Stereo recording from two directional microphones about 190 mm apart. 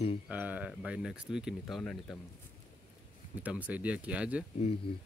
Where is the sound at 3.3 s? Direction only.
10° right (ahead or behind).